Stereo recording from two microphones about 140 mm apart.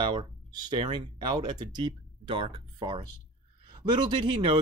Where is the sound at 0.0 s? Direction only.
35° right (ahead or behind).